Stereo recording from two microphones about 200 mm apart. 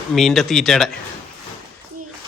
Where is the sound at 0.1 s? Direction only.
Centre (ahead or behind).